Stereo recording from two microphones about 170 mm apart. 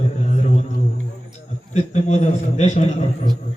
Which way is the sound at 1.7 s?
40° left (ahead or behind).